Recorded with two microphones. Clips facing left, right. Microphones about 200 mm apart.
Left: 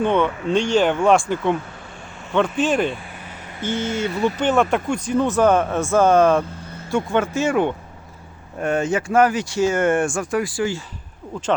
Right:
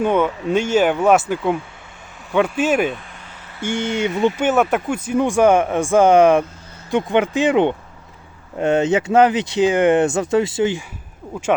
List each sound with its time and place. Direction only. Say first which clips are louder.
0.0 s speech: right 1 dB; 10° right (ahead or behind)